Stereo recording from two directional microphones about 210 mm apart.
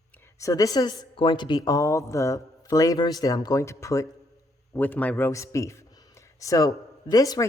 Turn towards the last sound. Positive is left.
turn(degrees=15)  # may be behind; listen again after turning